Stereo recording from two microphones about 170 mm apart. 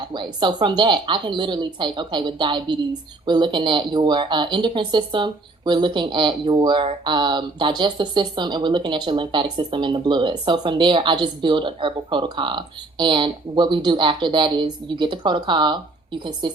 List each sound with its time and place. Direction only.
0.1 s speech: 30° right (ahead or behind)